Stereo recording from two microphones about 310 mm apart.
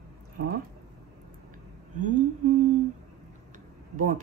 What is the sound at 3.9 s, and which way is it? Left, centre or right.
Speech, right.